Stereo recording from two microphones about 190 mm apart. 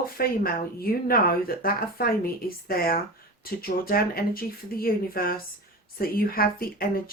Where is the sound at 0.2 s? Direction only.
50° left (ahead or behind).